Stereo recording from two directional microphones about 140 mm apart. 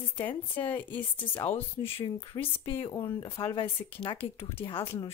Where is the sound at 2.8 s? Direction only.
30° left (ahead or behind).